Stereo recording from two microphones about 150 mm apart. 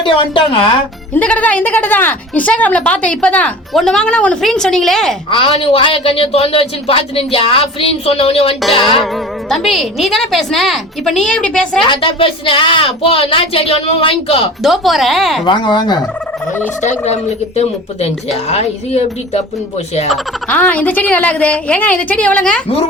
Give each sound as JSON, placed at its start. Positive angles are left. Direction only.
{"t": 0.0, "sound": "speech", "side_deg": 35}
{"t": 1.1, "sound": "speech", "side_deg": 10}
{"t": 5.3, "sound": "speech", "side_deg": 40}
{"t": 9.5, "sound": "a woman's voice", "side_deg": 0}
{"t": 11.9, "sound": "speech", "side_deg": 35}
{"t": 14.6, "sound": "a woman's voice", "side_deg": 0}
{"t": 15.4, "sound": "speech", "side_deg": 30}
{"t": 16.8, "sound": "speech", "side_deg": 50}
{"t": 20.1, "sound": "speech", "side_deg": 10}